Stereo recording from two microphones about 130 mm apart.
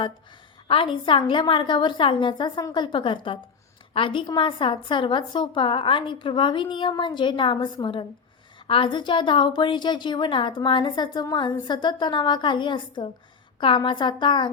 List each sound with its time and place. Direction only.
0.7 s a woman's voice: 40° left (ahead or behind)